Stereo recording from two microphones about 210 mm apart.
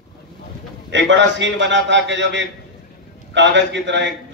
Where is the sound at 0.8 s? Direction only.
60° right (ahead or behind).